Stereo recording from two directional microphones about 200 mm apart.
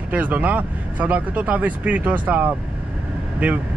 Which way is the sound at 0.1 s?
10° right (ahead or behind).